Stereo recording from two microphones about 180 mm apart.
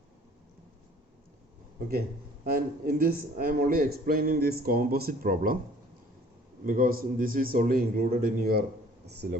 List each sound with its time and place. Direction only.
1.9 s a man's voice: 55° right (ahead or behind)
6.7 s a man's voice: 50° right (ahead or behind)